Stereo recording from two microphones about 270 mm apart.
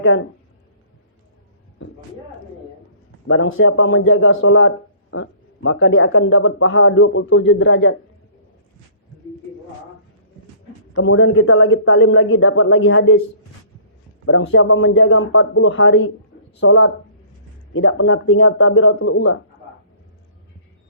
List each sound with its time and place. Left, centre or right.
3.2 s speech: left
10.9 s speech: left
14.3 s speech: left